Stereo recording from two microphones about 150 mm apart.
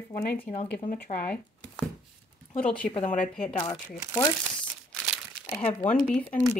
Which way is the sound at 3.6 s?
30° left (ahead or behind).